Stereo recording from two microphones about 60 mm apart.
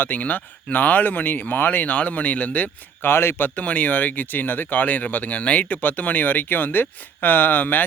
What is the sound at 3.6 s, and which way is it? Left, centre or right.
Speech, left.